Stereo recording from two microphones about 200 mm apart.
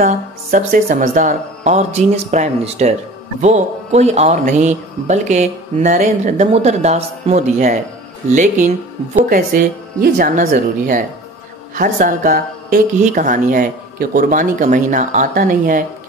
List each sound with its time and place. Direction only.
0.0 s speech: 40° right (ahead or behind)